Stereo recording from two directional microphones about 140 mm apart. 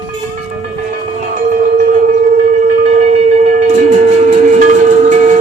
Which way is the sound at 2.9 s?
55° right (ahead or behind).